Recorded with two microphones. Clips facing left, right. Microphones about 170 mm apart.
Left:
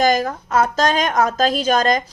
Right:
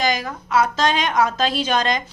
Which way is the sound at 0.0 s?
45° left (ahead or behind).